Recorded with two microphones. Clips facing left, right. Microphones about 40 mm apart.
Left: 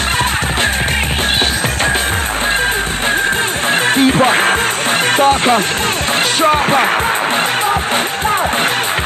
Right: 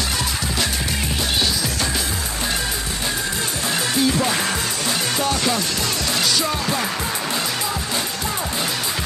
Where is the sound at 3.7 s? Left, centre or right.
Left.